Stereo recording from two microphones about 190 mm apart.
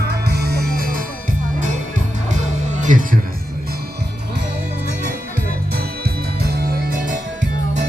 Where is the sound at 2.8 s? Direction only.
45° right (ahead or behind).